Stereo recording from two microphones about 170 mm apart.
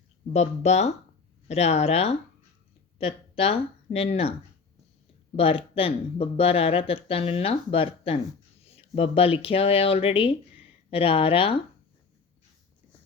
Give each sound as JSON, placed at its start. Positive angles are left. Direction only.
{"t": 0.3, "sound": "speech", "side_deg": 40}
{"t": 5.4, "sound": "speech", "side_deg": 35}